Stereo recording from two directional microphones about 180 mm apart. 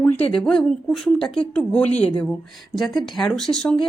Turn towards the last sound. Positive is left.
turn(degrees=5)  # may be behind; listen again after turning